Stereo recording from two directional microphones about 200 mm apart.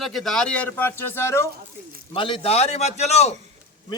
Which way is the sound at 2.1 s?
25° left (ahead or behind).